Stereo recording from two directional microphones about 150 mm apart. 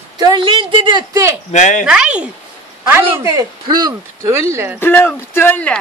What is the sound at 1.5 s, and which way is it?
Speech, 55° left (ahead or behind).